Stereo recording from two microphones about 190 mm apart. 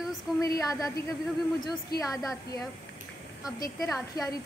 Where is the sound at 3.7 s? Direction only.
Centre (ahead or behind).